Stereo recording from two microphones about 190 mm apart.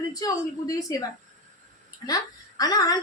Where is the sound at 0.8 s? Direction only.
20° left (ahead or behind).